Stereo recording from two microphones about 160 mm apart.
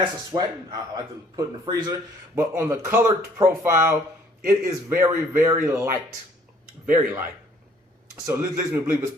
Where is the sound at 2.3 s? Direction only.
15° right (ahead or behind).